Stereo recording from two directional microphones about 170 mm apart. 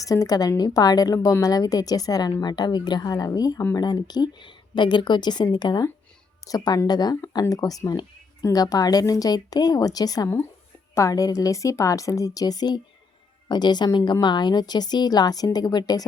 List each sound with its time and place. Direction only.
0.0 s a woman's voice: 20° left (ahead or behind)